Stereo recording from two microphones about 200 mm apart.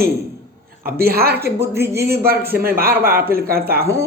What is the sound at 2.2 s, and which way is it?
Speech, 50° right (ahead or behind).